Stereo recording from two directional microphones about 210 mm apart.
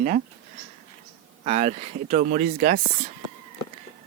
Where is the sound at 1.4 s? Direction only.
30° right (ahead or behind).